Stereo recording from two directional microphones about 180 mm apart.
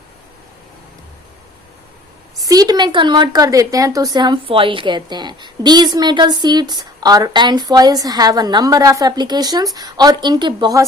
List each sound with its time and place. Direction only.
2.4 s a woman's voice: 20° right (ahead or behind)